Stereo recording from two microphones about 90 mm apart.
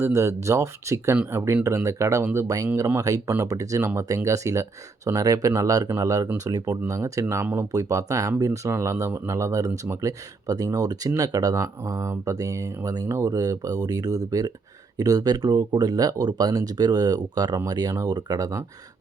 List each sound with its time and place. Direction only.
0.0 s speech: 30° right (ahead or behind)